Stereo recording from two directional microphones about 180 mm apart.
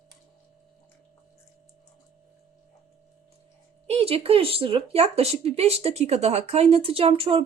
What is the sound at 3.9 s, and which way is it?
Speech, 35° right (ahead or behind).